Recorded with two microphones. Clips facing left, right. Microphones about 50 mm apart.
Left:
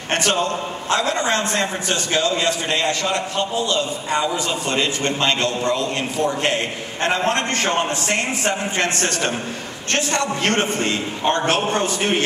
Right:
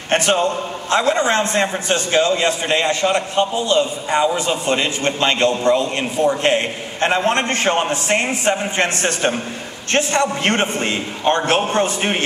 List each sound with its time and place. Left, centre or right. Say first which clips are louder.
0.1 s a man's voice: right 3 dB; right